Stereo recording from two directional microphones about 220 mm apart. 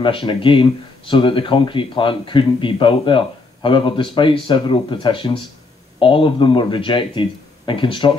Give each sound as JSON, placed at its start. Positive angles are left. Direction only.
{"t": 0.0, "sound": "speech", "side_deg": 20}